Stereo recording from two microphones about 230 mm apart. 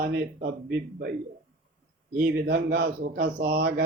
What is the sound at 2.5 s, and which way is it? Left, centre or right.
A man's voice, right.